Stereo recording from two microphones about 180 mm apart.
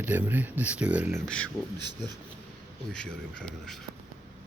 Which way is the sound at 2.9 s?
5° left (ahead or behind).